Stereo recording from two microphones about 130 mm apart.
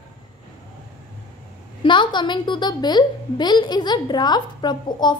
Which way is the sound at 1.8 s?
40° left (ahead or behind).